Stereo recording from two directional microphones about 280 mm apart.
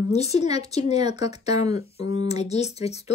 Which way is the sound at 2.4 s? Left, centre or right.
Left.